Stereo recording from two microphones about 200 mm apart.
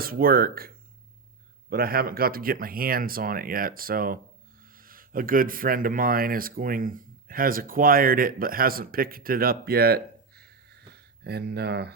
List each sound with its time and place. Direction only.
0.0 s speech: 45° right (ahead or behind)
1.7 s speech: 50° right (ahead or behind)